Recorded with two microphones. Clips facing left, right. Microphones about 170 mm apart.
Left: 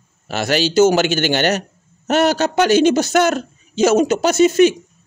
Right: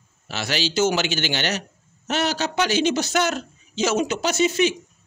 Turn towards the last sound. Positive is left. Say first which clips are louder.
# left 8 dB
turn(degrees=45)  # may be behind; listen again after turning